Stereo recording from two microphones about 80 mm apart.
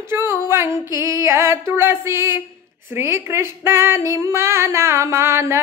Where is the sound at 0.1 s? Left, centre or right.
Right.